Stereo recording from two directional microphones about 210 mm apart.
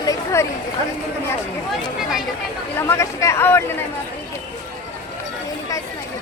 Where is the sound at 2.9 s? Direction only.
15° left (ahead or behind).